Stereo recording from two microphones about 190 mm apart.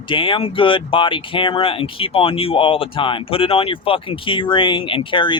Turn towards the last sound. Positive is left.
turn(degrees=25)  # may be behind; listen again after turning